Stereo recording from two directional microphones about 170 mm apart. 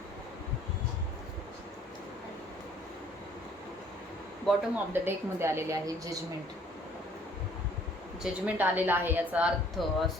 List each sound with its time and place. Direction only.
4.4 s a woman's voice: 10° right (ahead or behind)
8.2 s a woman's voice: 10° right (ahead or behind)